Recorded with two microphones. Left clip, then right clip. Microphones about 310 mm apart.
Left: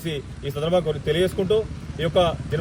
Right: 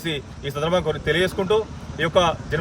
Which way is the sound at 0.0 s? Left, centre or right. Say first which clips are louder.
Right 2 dB; centre.